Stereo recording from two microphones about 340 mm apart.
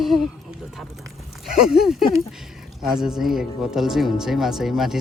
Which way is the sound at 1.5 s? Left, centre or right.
Centre.